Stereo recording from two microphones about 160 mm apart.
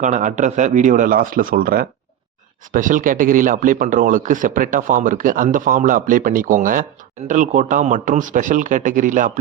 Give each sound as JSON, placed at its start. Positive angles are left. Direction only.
{"t": 0.0, "sound": "a man's voice", "side_deg": -50}